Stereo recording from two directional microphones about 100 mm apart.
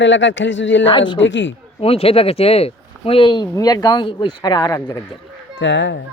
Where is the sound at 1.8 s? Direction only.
80° left; by 3.5 s 50° left (ahead or behind).